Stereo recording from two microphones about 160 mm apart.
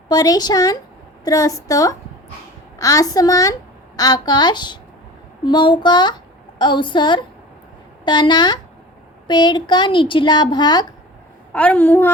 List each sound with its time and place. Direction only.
0.1 s a woman's voice: 25° left (ahead or behind)
11.5 s a woman's voice: 10° left (ahead or behind)